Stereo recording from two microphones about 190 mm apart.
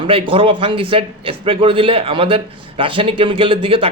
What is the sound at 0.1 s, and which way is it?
A man's voice, 30° right (ahead or behind).